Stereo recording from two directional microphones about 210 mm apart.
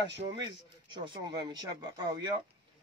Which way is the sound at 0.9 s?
20° right (ahead or behind).